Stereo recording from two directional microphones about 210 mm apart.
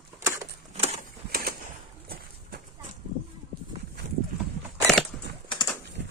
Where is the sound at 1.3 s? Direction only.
45° right (ahead or behind).